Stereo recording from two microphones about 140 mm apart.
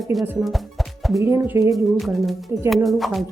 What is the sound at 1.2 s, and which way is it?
Speech, 20° right (ahead or behind).